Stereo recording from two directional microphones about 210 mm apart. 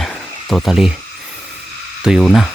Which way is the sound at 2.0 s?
Centre (ahead or behind).